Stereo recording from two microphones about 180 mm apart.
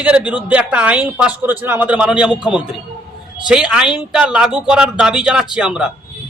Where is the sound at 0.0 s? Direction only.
5° right (ahead or behind).